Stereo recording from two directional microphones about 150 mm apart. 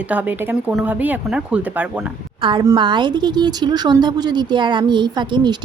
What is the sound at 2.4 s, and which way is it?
A woman's voice, 35° right (ahead or behind).